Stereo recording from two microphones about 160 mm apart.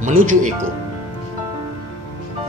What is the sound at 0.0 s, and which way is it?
Speech, 50° right (ahead or behind).